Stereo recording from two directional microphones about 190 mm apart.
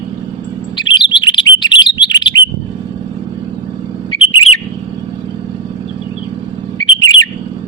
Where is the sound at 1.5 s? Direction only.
25° left (ahead or behind).